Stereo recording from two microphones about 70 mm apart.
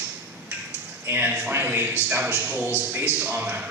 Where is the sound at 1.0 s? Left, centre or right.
Right.